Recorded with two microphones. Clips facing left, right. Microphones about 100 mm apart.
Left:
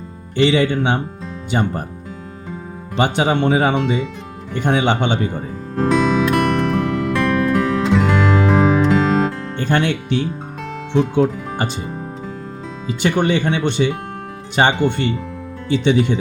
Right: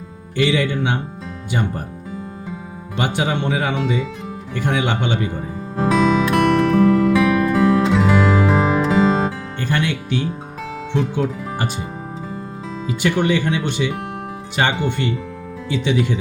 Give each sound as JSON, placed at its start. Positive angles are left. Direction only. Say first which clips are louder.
{"t": 0.3, "sound": "speech", "louder": "left 3 dB", "side_deg": 25}
{"t": 2.9, "sound": "speech", "louder": "left 4 dB", "side_deg": 25}
{"t": 5.7, "sound": "music", "louder": "even", "side_deg": 0}
{"t": 9.6, "sound": "speech", "louder": "left 4 dB", "side_deg": 30}
{"t": 13.0, "sound": "speech", "louder": "left 1 dB", "side_deg": 30}